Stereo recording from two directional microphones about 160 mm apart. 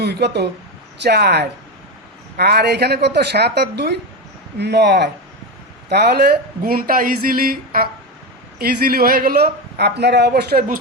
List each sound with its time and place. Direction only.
0.0 s speech: 90° right